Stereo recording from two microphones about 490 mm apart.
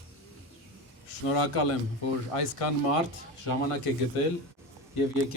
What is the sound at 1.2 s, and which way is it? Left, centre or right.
Speech, left.